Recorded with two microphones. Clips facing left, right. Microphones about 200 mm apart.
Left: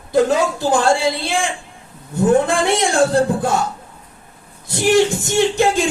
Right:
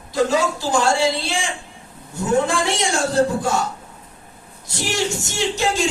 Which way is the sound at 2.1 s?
55° left (ahead or behind).